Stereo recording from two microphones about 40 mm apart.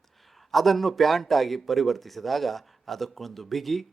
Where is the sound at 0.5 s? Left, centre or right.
Centre.